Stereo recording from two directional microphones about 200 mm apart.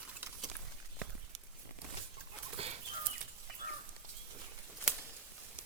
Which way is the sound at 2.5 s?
30° right (ahead or behind).